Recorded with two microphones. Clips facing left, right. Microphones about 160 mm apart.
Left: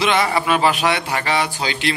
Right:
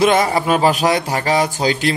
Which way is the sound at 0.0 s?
45° right (ahead or behind).